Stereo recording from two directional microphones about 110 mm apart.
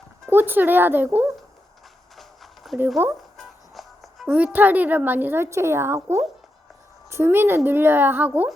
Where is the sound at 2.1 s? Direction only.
Centre (ahead or behind).